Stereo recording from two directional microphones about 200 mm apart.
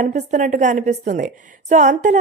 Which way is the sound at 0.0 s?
35° right (ahead or behind).